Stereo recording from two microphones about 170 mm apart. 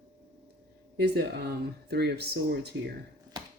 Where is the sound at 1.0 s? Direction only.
70° right (ahead or behind).